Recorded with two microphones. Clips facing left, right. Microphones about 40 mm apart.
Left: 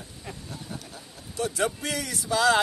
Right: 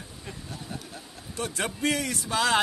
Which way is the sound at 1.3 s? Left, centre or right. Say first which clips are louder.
Left 4 dB; right.